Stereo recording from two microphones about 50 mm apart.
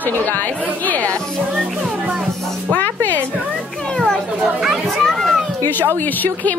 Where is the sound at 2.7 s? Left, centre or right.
Left.